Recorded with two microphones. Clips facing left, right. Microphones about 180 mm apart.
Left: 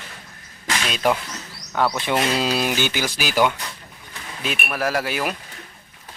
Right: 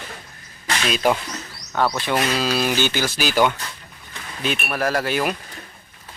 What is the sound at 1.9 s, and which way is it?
Speech, 20° left (ahead or behind).